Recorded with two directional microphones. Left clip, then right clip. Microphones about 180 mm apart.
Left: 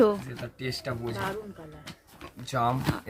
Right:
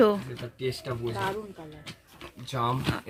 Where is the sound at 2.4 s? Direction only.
25° left (ahead or behind).